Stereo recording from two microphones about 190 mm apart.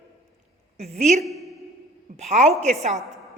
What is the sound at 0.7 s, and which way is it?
A woman's voice, 35° right (ahead or behind).